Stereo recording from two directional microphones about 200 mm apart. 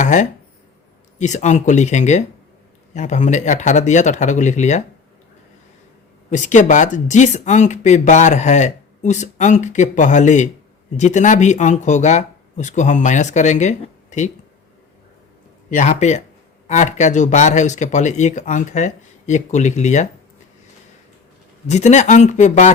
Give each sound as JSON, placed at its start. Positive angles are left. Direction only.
{"t": 0.0, "sound": "speech", "side_deg": 40}
{"t": 6.3, "sound": "speech", "side_deg": 40}
{"t": 15.7, "sound": "speech", "side_deg": 35}
{"t": 21.7, "sound": "speech", "side_deg": 35}